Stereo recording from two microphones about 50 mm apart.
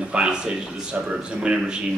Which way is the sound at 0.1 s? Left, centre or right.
Centre.